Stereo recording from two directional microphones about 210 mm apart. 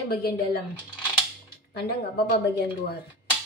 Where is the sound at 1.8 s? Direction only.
50° left (ahead or behind).